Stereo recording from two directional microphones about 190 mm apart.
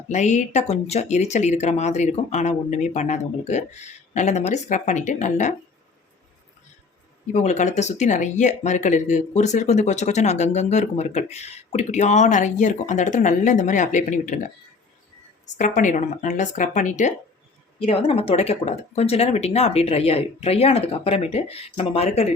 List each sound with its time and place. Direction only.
0.1 s speech: 40° left (ahead or behind)
7.3 s speech: 35° left (ahead or behind)
15.4 s speech: 40° left (ahead or behind)